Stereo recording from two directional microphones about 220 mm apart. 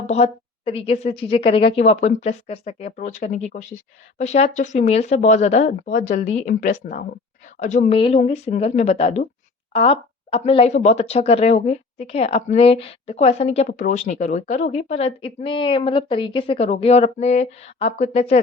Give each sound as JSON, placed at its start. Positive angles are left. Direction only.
{"t": 0.1, "sound": "speech", "side_deg": 25}